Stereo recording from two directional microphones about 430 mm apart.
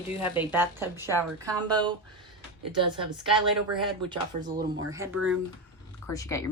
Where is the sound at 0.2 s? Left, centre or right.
Centre.